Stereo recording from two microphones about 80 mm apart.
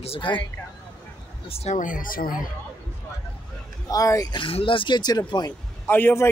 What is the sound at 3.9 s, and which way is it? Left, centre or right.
Speech, left.